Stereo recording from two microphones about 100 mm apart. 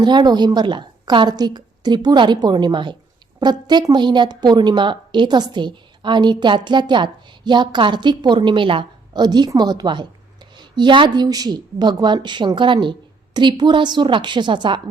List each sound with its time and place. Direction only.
0.0 s a woman's voice: 45° right (ahead or behind)